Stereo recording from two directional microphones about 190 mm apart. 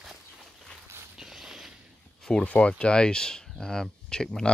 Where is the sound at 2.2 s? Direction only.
5° left (ahead or behind).